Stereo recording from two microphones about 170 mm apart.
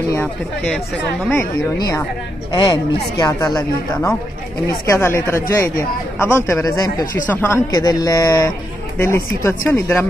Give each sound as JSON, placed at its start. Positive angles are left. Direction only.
{"t": 0.1, "sound": "speech", "side_deg": 10}
{"t": 1.8, "sound": "speech", "side_deg": 20}